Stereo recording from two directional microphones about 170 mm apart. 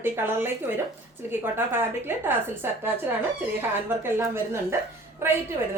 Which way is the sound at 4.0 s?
15° right (ahead or behind).